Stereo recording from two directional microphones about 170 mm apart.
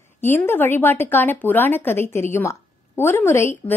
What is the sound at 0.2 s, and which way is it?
A woman's voice, 10° left (ahead or behind).